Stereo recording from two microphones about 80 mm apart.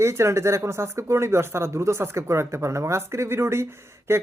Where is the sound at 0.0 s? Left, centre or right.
Right.